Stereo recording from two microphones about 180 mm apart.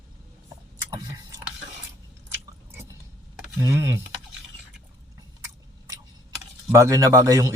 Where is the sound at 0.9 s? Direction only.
20° right (ahead or behind).